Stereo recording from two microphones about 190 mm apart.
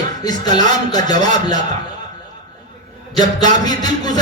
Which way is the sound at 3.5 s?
20° left (ahead or behind).